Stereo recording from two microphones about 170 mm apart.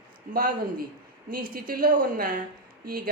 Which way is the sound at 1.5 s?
60° right (ahead or behind).